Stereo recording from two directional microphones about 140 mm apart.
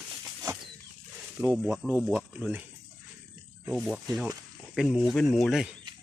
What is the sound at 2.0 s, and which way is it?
Speech, 5° right (ahead or behind).